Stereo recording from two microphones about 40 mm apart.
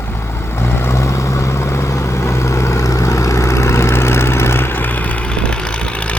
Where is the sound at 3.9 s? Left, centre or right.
Left.